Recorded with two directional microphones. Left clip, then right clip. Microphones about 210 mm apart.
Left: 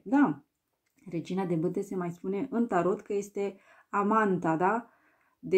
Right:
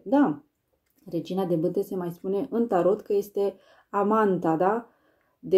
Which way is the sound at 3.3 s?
20° left (ahead or behind).